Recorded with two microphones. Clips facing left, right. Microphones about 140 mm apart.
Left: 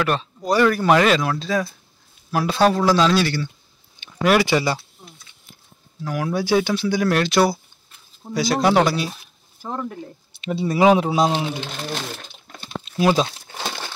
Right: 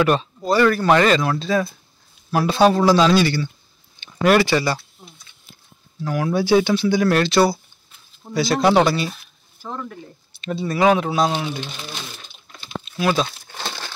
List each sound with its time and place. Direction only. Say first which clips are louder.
0.0 s speech: right 4 dB; 5° right (ahead or behind)
4.0 s a sound: right 2 dB; 5° left (ahead or behind)
4.5 s speech: even; 15° left (ahead or behind)
6.0 s speech: right 3 dB; centre (ahead or behind); by 11.4 s 20° left (ahead or behind)
11.5 s a sound: left 3 dB; 75° left (ahead or behind); by 12.6 s 60° left (ahead or behind)
13.0 s crumpling: left 2 dB; 20° left (ahead or behind)